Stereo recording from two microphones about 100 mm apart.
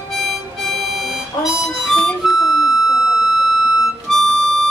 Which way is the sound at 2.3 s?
Centre (ahead or behind).